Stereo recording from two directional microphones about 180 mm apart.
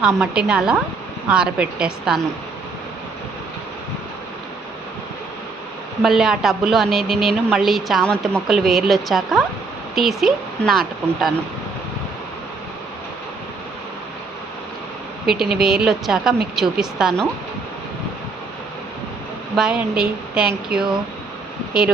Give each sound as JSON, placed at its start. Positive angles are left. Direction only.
{"t": 0.0, "sound": "a woman's voice", "side_deg": -5}
{"t": 6.0, "sound": "a woman's voice", "side_deg": 0}
{"t": 15.3, "sound": "a woman's voice", "side_deg": -5}
{"t": 19.5, "sound": "a woman's voice", "side_deg": -5}